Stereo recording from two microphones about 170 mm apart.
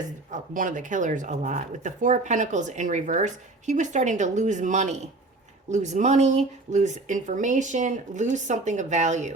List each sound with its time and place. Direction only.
0.3 s speech: 50° right (ahead or behind)